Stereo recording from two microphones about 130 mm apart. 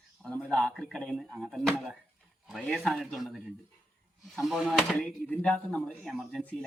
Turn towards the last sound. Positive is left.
turn(degrees=0)  # may be behind; listen again after turning